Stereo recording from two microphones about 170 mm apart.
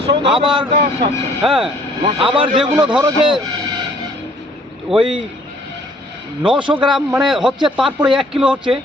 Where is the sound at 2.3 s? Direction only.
30° right (ahead or behind).